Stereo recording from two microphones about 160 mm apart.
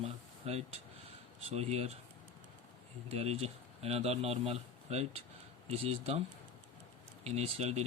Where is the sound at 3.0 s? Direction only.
40° right (ahead or behind).